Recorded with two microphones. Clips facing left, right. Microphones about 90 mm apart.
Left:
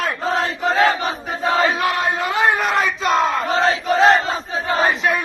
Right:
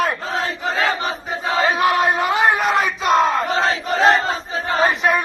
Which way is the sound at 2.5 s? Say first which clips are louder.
Right 1 dB; centre (ahead or behind).